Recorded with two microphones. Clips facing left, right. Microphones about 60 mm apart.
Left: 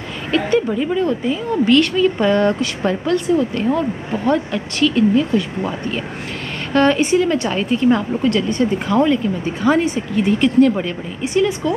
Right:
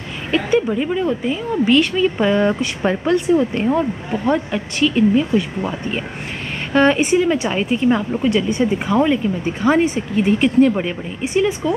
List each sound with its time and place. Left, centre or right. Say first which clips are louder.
0.3 s speech: even; centre
6.7 s speech: even; centre